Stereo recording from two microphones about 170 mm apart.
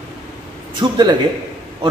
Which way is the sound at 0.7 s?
25° right (ahead or behind).